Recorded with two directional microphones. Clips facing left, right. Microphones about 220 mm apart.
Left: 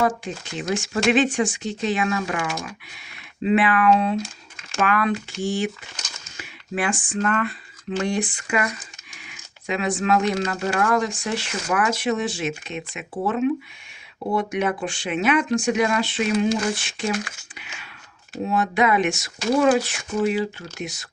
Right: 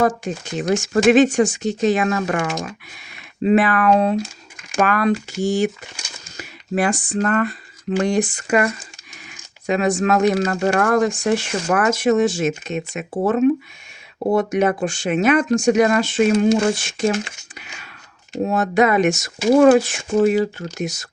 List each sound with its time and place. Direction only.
0.5 s speech: 45° right (ahead or behind)
17.5 s a sound: 40° right (ahead or behind)
18.4 s speech: 45° right (ahead or behind)
19.5 s speech: 55° right (ahead or behind)